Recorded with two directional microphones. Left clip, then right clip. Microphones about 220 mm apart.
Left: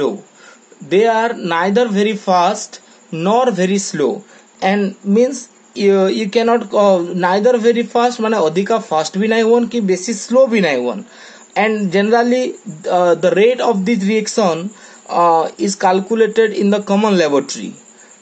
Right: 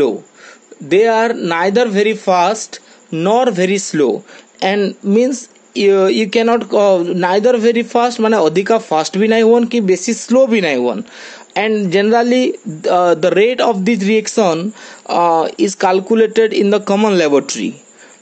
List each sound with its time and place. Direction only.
0.8 s speech: 45° right (ahead or behind)